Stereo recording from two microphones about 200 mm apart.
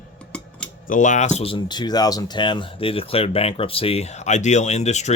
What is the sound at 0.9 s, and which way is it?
Speech, 40° left (ahead or behind).